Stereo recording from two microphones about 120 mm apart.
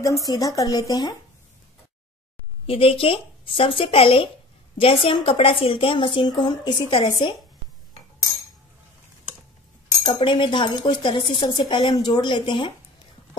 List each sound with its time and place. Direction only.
0.0 s speech: 30° left (ahead or behind)
2.6 s a woman's voice: 50° left (ahead or behind)
10.0 s a woman's voice: 40° left (ahead or behind)